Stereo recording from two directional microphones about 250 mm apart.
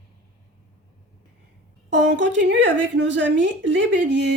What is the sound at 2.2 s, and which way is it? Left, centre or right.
Speech, right.